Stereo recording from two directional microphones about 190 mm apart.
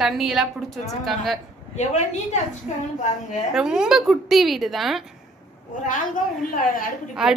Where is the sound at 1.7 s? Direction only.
35° left (ahead or behind).